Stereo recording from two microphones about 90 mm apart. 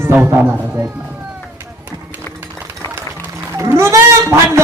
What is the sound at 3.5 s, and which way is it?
Sheep, 30° right (ahead or behind).